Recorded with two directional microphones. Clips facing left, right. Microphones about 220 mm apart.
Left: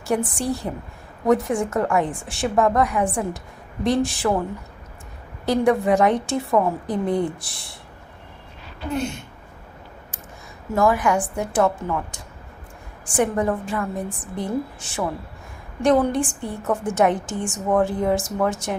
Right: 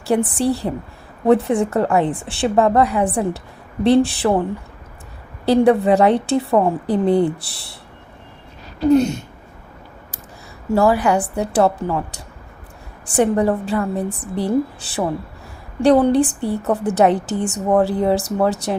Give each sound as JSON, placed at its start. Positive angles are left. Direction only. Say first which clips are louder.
{"t": 0.1, "sound": "a woman's voice", "louder": "right 5 dB", "side_deg": -35}
{"t": 5.5, "sound": "a woman's voice", "louder": "right 5 dB", "side_deg": -30}
{"t": 8.8, "sound": "a woman's voice", "louder": "right 12 dB", "side_deg": -40}
{"t": 10.7, "sound": "a woman's voice", "louder": "right 4 dB", "side_deg": -35}
{"t": 13.1, "sound": "a woman's voice", "louder": "right 5 dB", "side_deg": -35}